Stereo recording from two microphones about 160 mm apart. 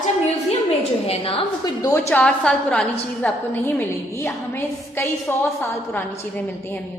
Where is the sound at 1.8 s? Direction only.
15° left (ahead or behind).